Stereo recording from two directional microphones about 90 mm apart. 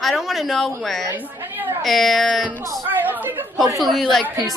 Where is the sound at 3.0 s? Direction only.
20° right (ahead or behind).